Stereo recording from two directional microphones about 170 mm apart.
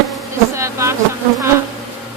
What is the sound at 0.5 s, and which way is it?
Bee, 15° right (ahead or behind).